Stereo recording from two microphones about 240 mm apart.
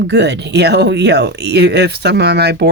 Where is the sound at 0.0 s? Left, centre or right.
Right.